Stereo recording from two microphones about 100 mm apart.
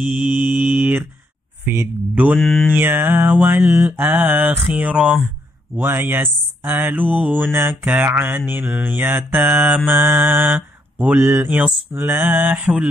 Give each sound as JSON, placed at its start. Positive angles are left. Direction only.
{"t": 0.0, "sound": "mantra", "side_deg": -15}
{"t": 2.3, "sound": "mantra", "side_deg": 5}
{"t": 2.7, "sound": "mantra", "side_deg": -20}
{"t": 5.8, "sound": "mantra", "side_deg": -20}
{"t": 11.5, "sound": "mantra", "side_deg": -10}
{"t": 12.0, "sound": "mantra", "side_deg": -20}